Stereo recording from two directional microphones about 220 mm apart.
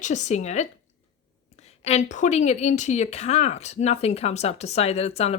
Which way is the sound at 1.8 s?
30° left (ahead or behind).